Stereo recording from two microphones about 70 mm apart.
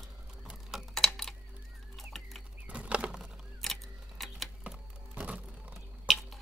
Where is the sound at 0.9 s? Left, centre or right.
Centre.